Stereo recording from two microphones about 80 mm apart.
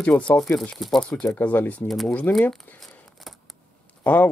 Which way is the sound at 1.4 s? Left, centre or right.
Left.